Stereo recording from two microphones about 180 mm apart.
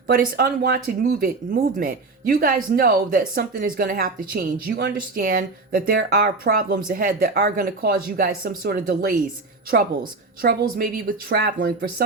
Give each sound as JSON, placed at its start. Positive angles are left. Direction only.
{"t": 0.1, "sound": "a woman's voice", "side_deg": -55}